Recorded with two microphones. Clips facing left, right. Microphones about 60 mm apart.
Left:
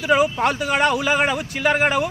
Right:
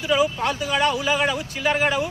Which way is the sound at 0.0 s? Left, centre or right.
Left.